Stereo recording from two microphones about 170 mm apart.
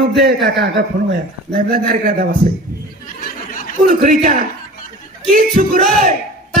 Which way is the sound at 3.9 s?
50° right (ahead or behind).